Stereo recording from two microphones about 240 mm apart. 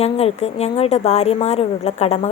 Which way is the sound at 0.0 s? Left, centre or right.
Left.